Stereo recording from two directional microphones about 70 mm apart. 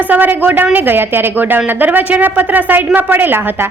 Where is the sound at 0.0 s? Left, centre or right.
Right.